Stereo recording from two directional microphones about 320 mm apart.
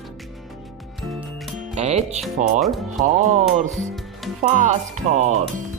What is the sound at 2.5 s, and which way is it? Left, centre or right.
Speech, centre.